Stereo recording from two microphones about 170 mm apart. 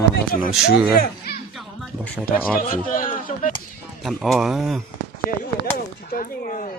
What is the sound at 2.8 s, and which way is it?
Speech, 55° left (ahead or behind).